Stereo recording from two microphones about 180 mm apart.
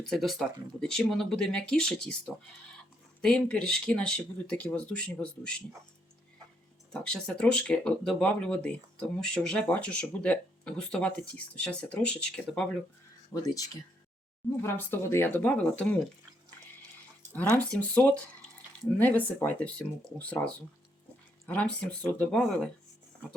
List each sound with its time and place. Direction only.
0.0 s speech: centre (ahead or behind)
6.9 s speech: 5° left (ahead or behind)
13.3 s speech: 20° left (ahead or behind)
17.7 s speech: 5° left (ahead or behind)